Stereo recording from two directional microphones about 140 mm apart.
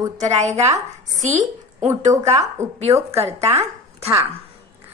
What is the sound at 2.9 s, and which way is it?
Speech, 20° right (ahead or behind).